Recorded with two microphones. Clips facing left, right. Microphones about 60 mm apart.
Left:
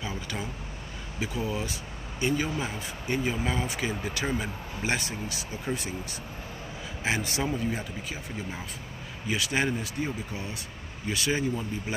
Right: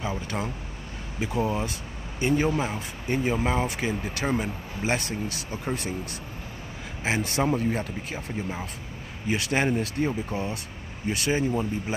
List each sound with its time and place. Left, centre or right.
0.0 s speech: right
1.3 s speech: right
2.6 s speech: right
7.0 s a man's voice: right
7.3 s speech: right
9.3 s speech: right
11.1 s speech: right